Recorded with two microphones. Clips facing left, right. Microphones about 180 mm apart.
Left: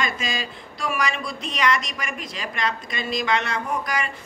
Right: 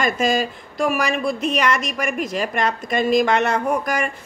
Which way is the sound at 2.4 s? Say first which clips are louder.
Right 2 dB; 50° right (ahead or behind).